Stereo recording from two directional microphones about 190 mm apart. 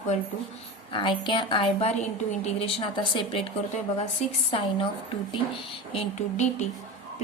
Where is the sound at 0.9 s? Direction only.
25° left (ahead or behind).